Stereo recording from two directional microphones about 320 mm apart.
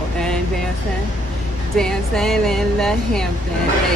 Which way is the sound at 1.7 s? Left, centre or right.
Centre.